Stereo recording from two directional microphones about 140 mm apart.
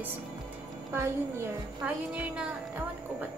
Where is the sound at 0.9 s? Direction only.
20° right (ahead or behind).